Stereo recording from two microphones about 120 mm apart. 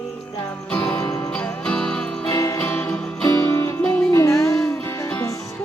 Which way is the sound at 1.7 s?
5° left (ahead or behind).